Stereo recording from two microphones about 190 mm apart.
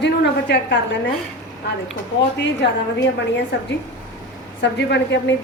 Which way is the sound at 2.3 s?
65° left (ahead or behind).